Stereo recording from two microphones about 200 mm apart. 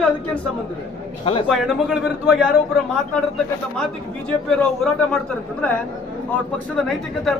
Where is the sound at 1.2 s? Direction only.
25° left (ahead or behind).